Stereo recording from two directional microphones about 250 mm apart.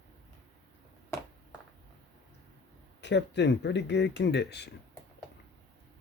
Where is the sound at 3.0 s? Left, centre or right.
Left.